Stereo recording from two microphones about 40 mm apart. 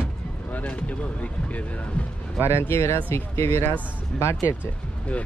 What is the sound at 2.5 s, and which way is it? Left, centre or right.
Speech, left.